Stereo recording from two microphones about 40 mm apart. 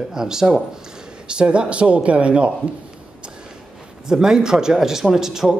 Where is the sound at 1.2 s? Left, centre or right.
Right.